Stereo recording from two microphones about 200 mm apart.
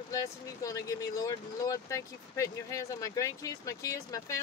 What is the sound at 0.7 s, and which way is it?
Speech, 20° left (ahead or behind).